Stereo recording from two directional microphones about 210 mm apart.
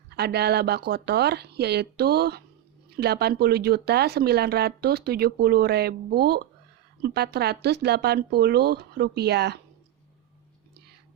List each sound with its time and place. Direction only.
0.2 s speech: 50° right (ahead or behind)